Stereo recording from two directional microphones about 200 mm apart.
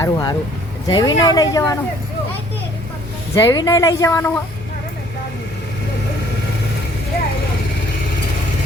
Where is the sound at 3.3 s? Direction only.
15° left (ahead or behind).